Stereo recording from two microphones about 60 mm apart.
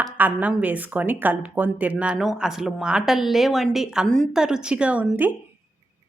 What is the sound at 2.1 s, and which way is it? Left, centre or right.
A woman's voice, centre.